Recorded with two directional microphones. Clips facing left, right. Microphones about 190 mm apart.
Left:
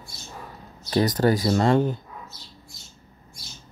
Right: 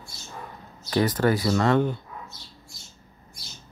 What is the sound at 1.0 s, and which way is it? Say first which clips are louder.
Speech: left 2 dB; 40° left (ahead or behind).